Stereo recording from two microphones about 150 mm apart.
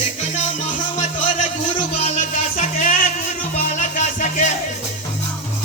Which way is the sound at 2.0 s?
50° left (ahead or behind).